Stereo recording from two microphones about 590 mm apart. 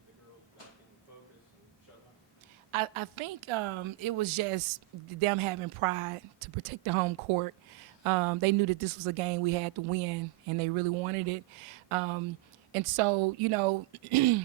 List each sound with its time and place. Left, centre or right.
2.7 s a woman's voice: right